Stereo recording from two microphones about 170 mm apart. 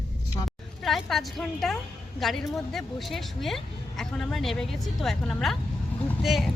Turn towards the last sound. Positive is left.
turn(degrees=0)  # may be behind; listen again after turning